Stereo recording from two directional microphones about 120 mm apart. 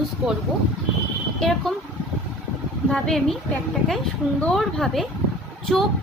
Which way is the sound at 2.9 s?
5° left (ahead or behind).